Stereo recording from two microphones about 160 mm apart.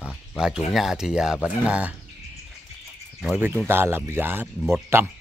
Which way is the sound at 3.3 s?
15° right (ahead or behind).